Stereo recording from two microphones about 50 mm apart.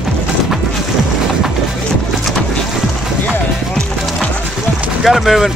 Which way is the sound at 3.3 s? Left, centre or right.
Centre.